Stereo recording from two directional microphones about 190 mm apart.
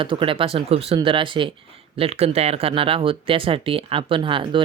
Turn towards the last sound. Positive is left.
turn(degrees=-25)  # may be behind; listen again after turning